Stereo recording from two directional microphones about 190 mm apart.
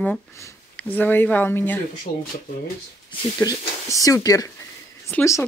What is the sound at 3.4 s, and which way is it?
Speech, 20° left (ahead or behind).